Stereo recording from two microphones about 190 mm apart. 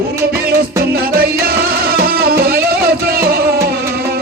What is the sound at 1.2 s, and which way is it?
Music, 50° right (ahead or behind).